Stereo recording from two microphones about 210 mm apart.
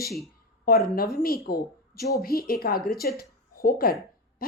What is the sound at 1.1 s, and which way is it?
A woman's voice, 45° left (ahead or behind).